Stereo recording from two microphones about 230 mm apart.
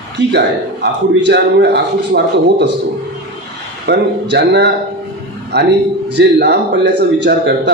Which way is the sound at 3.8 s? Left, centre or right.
Right.